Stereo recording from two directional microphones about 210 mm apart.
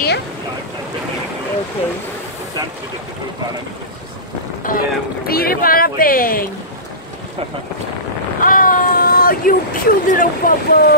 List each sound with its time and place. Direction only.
4.6 s speech: 45° left (ahead or behind)
8.4 s speech: 40° left (ahead or behind)